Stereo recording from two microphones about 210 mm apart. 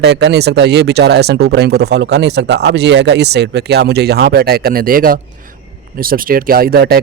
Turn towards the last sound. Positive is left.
turn(degrees=-50)  # may be behind; listen again after turning